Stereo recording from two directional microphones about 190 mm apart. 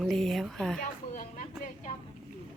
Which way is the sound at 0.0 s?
Centre (ahead or behind).